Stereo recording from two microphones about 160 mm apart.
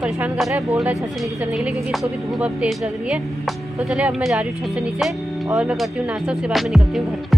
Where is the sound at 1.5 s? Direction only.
Centre (ahead or behind).